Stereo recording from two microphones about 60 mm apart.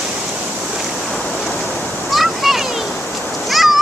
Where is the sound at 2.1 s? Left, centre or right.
Centre.